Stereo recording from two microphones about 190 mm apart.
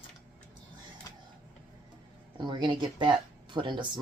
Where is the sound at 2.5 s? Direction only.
25° right (ahead or behind).